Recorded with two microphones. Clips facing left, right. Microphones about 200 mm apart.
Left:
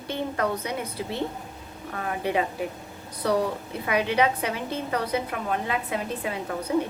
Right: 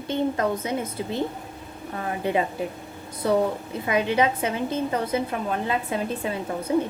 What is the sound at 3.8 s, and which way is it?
A woman's voice, 25° right (ahead or behind).